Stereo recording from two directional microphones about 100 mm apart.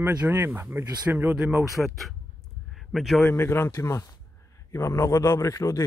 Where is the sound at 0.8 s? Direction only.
40° right (ahead or behind).